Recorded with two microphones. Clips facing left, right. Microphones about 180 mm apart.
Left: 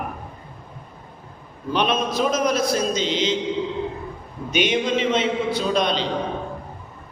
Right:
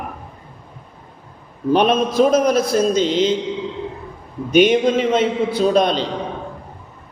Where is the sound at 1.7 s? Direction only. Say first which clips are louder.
Right 6 dB; 45° right (ahead or behind).